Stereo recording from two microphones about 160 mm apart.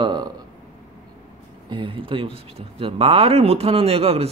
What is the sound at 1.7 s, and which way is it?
Speech, 30° right (ahead or behind).